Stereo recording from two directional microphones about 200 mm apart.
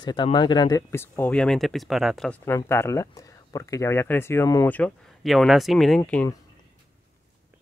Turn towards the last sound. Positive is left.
turn(degrees=5)  # may be behind; listen again after turning